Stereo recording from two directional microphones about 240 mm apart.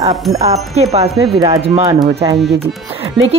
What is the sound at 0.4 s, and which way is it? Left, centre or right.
Speech, right.